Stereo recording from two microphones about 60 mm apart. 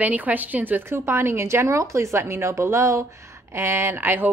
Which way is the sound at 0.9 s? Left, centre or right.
Right.